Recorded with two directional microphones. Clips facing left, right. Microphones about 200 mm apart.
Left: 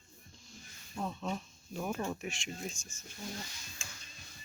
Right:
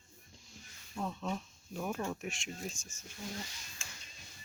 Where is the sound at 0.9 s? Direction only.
Centre (ahead or behind).